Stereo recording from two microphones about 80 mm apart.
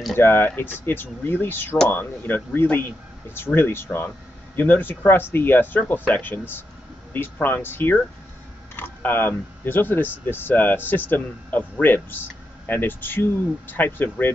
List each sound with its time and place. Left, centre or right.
0.1 s speech: left